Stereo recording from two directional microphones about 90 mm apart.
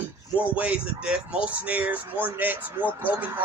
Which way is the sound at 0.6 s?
15° right (ahead or behind).